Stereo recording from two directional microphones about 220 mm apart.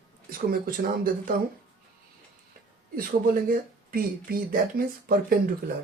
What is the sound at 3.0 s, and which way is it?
Speech, 40° right (ahead or behind).